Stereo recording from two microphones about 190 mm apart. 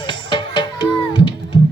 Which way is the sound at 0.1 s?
25° left (ahead or behind).